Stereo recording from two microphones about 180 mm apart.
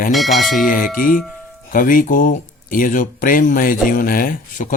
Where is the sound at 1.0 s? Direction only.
50° left (ahead or behind).